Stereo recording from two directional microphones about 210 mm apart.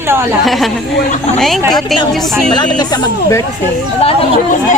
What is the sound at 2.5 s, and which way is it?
Speech, 20° left (ahead or behind).